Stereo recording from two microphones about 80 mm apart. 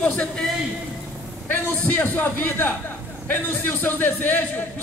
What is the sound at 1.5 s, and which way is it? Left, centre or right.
A man's voice, left.